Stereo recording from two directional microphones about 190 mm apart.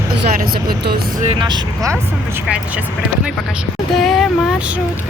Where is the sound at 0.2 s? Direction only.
55° right (ahead or behind).